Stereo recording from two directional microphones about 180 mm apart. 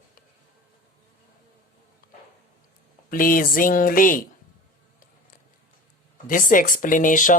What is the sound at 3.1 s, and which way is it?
Speech, 50° left (ahead or behind).